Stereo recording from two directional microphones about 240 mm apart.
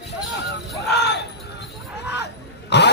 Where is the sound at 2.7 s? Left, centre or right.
Left.